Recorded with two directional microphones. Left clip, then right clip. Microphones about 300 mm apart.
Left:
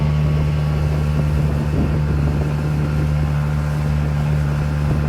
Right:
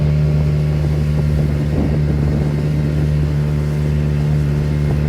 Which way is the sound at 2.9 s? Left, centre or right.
Left.